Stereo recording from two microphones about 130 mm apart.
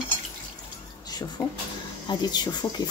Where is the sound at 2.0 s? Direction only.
30° left (ahead or behind).